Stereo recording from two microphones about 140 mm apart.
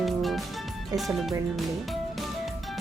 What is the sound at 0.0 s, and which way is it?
Music, centre (ahead or behind).